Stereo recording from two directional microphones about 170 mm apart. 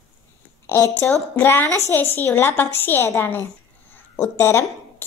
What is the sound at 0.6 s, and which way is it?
A woman's voice, 15° left (ahead or behind).